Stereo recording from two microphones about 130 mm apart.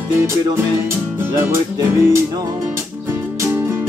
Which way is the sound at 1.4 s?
20° right (ahead or behind).